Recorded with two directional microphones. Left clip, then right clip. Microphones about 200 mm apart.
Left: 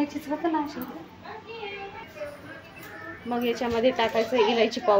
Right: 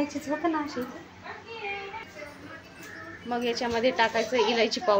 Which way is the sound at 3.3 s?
Centre (ahead or behind).